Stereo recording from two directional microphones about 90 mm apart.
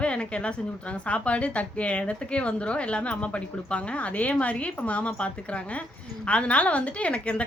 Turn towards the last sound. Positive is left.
turn(degrees=15)  # may be behind; listen again after turning